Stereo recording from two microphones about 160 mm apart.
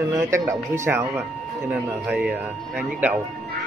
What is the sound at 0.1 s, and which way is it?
A man's voice, 20° right (ahead or behind).